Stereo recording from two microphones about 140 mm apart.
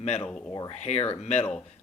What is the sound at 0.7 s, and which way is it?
Speech, 50° left (ahead or behind).